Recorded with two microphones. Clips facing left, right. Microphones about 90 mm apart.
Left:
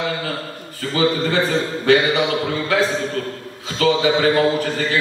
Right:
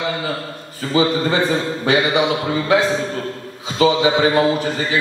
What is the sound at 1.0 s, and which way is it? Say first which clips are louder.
A man's voice: right 2 dB; 20° right (ahead or behind).